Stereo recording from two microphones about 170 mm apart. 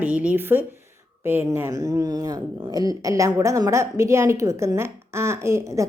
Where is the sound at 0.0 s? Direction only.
10° right (ahead or behind).